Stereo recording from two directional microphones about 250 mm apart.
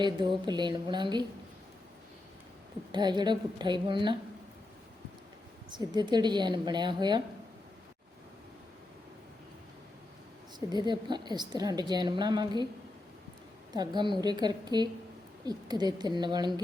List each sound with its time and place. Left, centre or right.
0.0 s a woman's voice: centre
2.9 s a woman's voice: centre
5.7 s a woman's voice: centre
10.8 s a woman's voice: centre
13.7 s a woman's voice: centre